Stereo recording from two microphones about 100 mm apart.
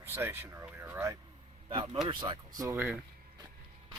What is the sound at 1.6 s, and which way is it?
A man's voice, 55° right (ahead or behind).